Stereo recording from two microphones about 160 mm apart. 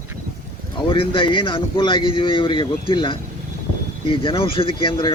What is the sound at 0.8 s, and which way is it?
Speech, 35° left (ahead or behind).